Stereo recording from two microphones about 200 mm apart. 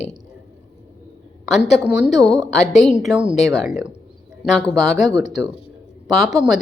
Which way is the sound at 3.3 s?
Centre (ahead or behind).